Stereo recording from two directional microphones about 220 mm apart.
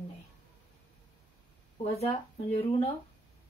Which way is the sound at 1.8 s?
30° left (ahead or behind).